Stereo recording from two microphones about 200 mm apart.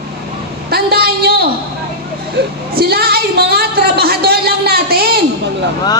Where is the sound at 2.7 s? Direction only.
50° right (ahead or behind).